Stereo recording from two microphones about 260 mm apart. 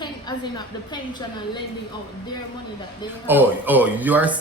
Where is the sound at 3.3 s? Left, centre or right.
Centre.